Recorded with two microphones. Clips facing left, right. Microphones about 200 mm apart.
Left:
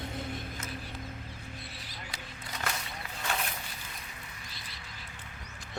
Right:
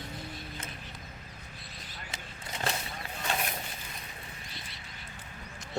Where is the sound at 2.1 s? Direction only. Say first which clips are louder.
Right 2 dB; 25° right (ahead or behind).